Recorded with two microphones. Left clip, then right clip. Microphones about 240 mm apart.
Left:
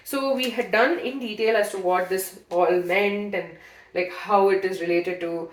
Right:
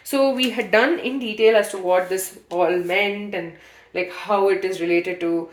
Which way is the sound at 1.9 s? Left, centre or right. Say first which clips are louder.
Right 3 dB; right.